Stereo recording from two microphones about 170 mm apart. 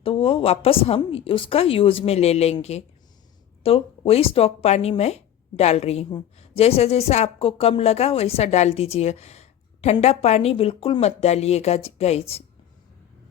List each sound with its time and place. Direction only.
0.0 s a woman's voice: 35° left (ahead or behind)